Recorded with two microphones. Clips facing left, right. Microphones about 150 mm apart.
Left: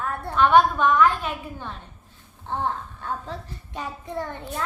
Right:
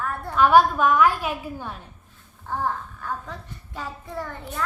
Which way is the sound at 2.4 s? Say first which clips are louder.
Even; 25° left (ahead or behind).